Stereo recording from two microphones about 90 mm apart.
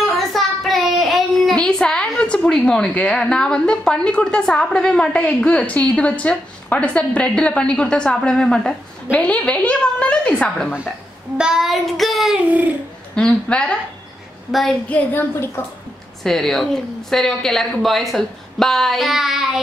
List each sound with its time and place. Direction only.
0.0 s a child's voice: centre (ahead or behind)
11.3 s a woman's voice: 5° right (ahead or behind)
12.4 s a sound: 15° right (ahead or behind)
13.1 s a woman's voice: 10° left (ahead or behind)
14.5 s a woman's voice: centre (ahead or behind)
14.9 s a woman's voice: 25° left (ahead or behind)
16.3 s a woman's voice: 5° left (ahead or behind)